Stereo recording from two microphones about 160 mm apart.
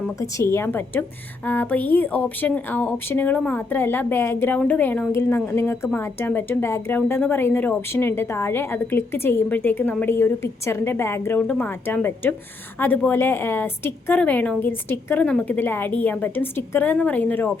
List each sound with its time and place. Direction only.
0.2 s speech: 20° left (ahead or behind)